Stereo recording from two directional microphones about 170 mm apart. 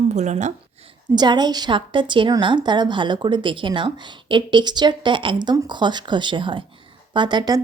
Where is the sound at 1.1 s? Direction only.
25° right (ahead or behind).